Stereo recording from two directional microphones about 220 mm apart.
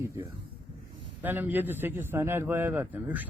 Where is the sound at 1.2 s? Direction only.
10° right (ahead or behind).